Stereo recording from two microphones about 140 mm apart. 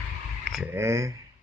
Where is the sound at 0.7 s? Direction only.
20° right (ahead or behind).